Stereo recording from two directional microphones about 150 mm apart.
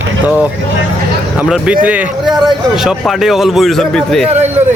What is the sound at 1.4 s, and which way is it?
Speech, 5° right (ahead or behind).